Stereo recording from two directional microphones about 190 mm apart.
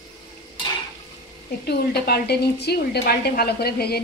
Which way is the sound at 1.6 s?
55° left (ahead or behind).